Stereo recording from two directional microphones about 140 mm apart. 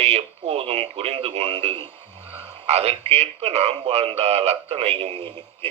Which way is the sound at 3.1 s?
50° right (ahead or behind).